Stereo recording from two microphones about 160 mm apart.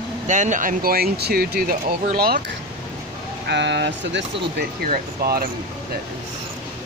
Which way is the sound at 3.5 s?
90° right.